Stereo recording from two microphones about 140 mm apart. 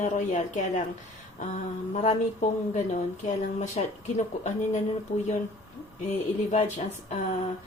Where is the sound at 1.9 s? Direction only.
55° left (ahead or behind).